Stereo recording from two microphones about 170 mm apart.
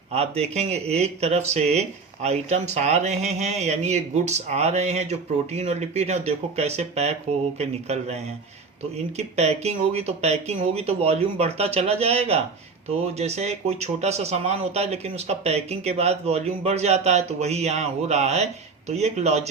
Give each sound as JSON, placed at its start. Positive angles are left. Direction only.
{"t": 0.1, "sound": "speech", "side_deg": -40}